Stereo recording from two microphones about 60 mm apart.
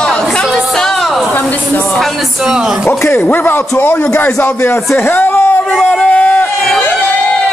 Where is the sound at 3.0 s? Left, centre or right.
Left.